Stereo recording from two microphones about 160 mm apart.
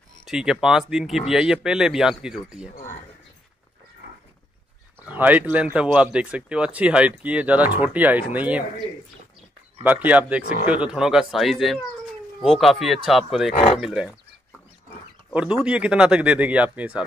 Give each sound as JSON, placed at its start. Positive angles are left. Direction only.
{"t": 0.2, "sound": "speech", "side_deg": -5}
{"t": 5.0, "sound": "speech", "side_deg": -10}
{"t": 9.8, "sound": "speech", "side_deg": -10}
{"t": 13.5, "sound": "speech", "side_deg": 40}
{"t": 13.7, "sound": "speech", "side_deg": -5}
{"t": 15.6, "sound": "speech", "side_deg": -5}